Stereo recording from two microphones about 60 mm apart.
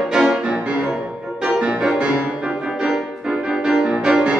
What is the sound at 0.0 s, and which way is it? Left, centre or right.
Music, centre.